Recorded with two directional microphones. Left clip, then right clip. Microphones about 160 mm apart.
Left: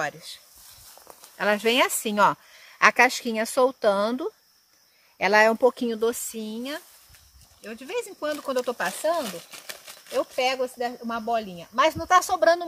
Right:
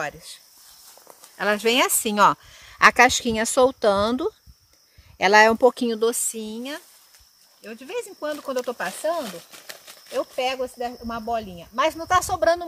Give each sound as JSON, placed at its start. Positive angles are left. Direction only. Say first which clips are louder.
{"t": 0.0, "sound": "speech", "louder": "even", "side_deg": -10}
{"t": 1.3, "sound": "speech", "louder": "right 1 dB", "side_deg": -30}
{"t": 7.6, "sound": "speech", "louder": "even", "side_deg": 0}